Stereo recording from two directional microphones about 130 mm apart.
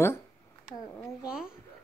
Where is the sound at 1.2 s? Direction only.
5° right (ahead or behind).